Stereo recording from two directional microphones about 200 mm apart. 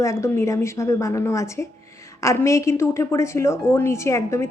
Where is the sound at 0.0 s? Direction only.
15° left (ahead or behind).